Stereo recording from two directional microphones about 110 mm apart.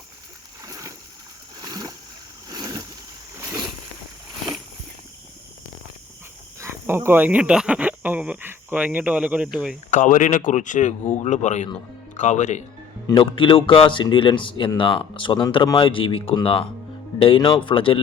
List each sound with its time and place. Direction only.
0.6 s splash: 30° right (ahead or behind)
2.5 s boat: 35° right (ahead or behind)
3.3 s vehicle: 25° right (ahead or behind)
6.6 s speech: 20° right (ahead or behind)
10.5 s speech: 90° left
13.1 s speech: 50° left (ahead or behind)